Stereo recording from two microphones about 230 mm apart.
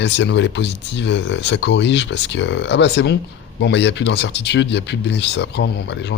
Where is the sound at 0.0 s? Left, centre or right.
Left.